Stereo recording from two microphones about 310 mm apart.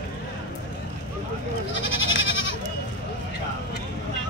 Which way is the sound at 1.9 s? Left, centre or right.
Left.